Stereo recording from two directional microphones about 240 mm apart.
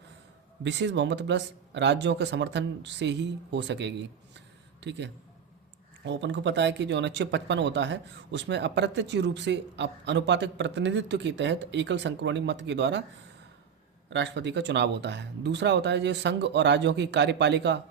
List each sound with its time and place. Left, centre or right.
0.6 s speech: right
4.4 s a sound: right
6.1 s speech: right
14.1 s speech: right